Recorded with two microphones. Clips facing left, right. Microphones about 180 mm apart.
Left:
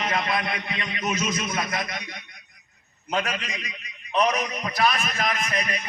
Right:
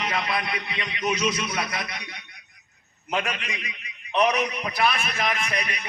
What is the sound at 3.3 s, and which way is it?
Speech, 40° left (ahead or behind).